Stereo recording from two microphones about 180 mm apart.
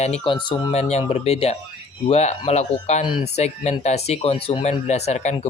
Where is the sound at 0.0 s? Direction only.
35° left (ahead or behind).